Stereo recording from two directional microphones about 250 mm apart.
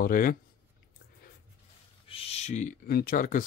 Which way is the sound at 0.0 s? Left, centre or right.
Left.